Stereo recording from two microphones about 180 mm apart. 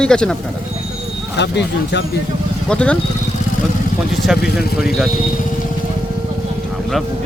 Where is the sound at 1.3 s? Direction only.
75° left (ahead or behind).